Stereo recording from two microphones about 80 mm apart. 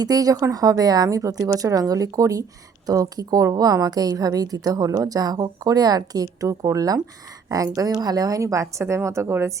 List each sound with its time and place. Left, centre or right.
0.0 s a woman's voice: right